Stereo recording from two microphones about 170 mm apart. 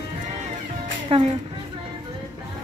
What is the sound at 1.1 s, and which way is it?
Speech, 35° right (ahead or behind).